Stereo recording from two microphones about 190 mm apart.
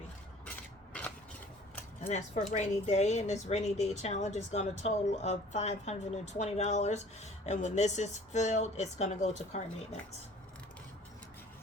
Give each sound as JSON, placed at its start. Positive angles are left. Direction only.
{"t": 2.0, "sound": "speech", "side_deg": 35}